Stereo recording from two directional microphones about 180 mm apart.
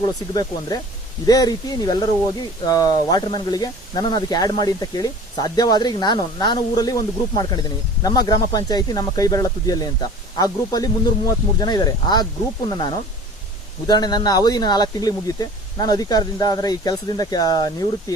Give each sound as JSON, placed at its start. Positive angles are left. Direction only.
{"t": 0.0, "sound": "speech", "side_deg": 20}
{"t": 13.8, "sound": "speech", "side_deg": 25}